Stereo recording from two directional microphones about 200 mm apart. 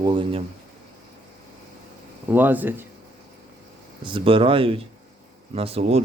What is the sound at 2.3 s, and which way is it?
Speech, 10° right (ahead or behind).